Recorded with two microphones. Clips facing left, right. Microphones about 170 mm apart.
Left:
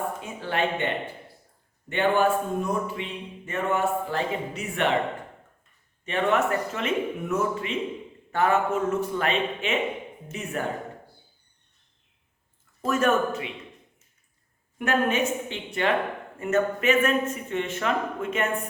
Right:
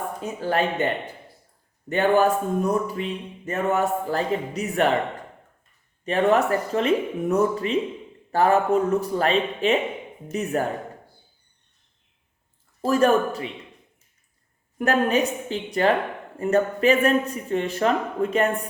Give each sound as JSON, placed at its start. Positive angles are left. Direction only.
{"t": 0.2, "sound": "speech", "side_deg": -40}
{"t": 1.9, "sound": "speech", "side_deg": -40}
{"t": 6.1, "sound": "speech", "side_deg": -35}
{"t": 12.8, "sound": "speech", "side_deg": -35}
{"t": 14.8, "sound": "speech", "side_deg": -35}